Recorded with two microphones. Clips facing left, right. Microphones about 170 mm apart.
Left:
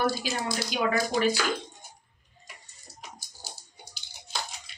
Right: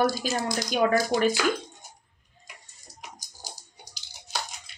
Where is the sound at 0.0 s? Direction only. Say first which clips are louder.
Right 3 dB; 45° right (ahead or behind).